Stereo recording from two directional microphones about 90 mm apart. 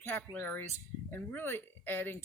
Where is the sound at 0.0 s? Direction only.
20° left (ahead or behind).